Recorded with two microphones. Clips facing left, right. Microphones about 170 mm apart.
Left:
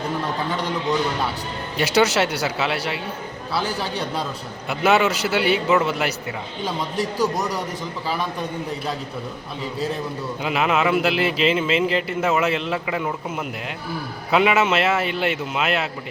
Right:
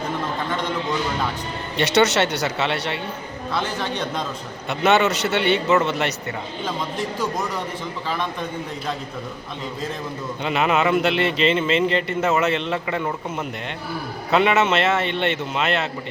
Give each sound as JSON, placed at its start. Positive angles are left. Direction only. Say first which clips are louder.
{"t": 0.3, "sound": "a sound", "louder": "even", "side_deg": 10}
{"t": 2.0, "sound": "a man's voice", "louder": "even", "side_deg": 5}
{"t": 3.6, "sound": "speech", "louder": "left 1 dB", "side_deg": 35}
{"t": 4.7, "sound": "a man's voice", "louder": "even", "side_deg": 5}
{"t": 6.9, "sound": "speech", "louder": "left 3 dB", "side_deg": 35}
{"t": 8.1, "sound": "a man's voice", "louder": "even", "side_deg": 10}
{"t": 10.4, "sound": "a man's voice", "louder": "right 1 dB", "side_deg": 0}
{"t": 14.3, "sound": "a man's voice", "louder": "even", "side_deg": 5}